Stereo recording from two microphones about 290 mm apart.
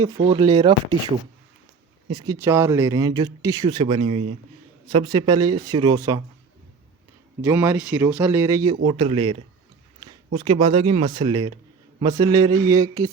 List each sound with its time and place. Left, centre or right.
0.3 s speech: centre
2.1 s speech: centre
7.4 s speech: centre
10.0 s a sound: centre
10.3 s speech: centre